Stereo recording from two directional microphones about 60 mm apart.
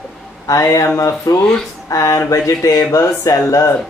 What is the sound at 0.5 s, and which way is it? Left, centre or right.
Speech, left.